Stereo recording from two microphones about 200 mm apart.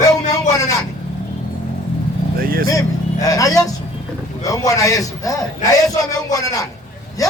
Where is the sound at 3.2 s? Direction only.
15° left (ahead or behind).